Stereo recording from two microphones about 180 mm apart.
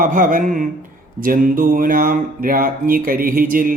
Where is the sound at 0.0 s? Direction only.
50° right (ahead or behind).